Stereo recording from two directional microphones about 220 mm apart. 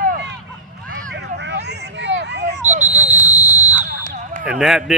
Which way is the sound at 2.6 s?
30° right (ahead or behind).